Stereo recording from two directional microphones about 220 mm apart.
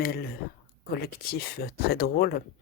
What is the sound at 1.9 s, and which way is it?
Speech, 45° left (ahead or behind).